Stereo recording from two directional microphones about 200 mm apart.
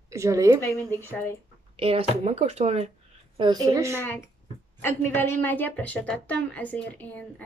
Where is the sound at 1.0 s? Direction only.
10° left (ahead or behind).